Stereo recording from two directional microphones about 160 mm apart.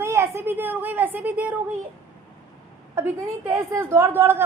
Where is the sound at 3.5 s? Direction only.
15° right (ahead or behind).